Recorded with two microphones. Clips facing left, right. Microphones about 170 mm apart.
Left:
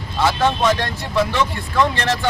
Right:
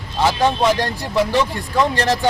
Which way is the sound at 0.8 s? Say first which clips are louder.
Right 1 dB; 35° right (ahead or behind).